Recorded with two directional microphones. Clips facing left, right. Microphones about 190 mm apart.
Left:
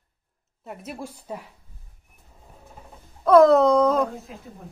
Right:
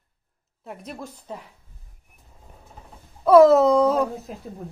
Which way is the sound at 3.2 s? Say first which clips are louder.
Right 1 dB; 5° right (ahead or behind).